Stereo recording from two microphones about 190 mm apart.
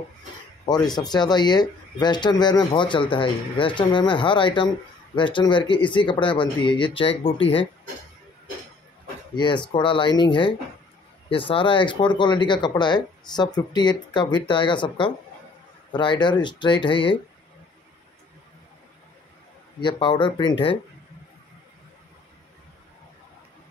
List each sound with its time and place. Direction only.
0.8 s speech: 20° left (ahead or behind)
9.3 s speech: 25° left (ahead or behind)
19.8 s speech: 25° left (ahead or behind)